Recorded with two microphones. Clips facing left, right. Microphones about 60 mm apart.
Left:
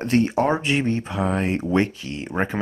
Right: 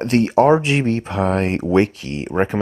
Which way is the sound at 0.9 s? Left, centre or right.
Right.